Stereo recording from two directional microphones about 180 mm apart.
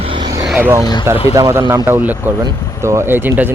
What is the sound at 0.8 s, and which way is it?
Speech, 25° left (ahead or behind).